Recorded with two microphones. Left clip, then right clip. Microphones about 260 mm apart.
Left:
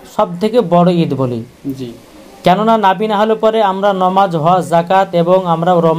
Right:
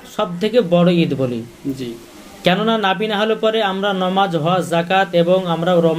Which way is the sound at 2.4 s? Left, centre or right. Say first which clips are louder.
Left 6 dB; left.